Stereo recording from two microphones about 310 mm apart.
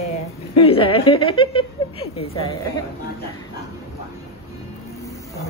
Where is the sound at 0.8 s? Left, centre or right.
Centre.